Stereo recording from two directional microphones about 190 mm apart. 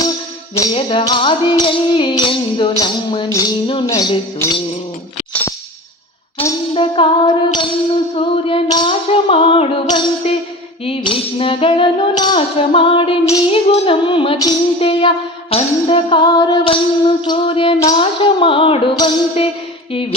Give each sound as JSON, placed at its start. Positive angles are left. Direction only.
{"t": 0.7, "sound": "music", "side_deg": 30}
{"t": 6.7, "sound": "music", "side_deg": 25}